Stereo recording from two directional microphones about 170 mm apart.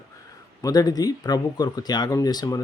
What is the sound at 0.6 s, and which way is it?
Speech, 20° left (ahead or behind).